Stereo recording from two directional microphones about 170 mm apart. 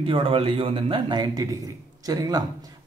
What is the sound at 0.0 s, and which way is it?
A man's voice, 30° right (ahead or behind).